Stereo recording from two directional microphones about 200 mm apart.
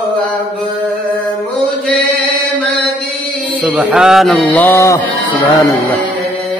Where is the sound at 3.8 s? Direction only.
5° right (ahead or behind); by 5.0 s 10° left (ahead or behind).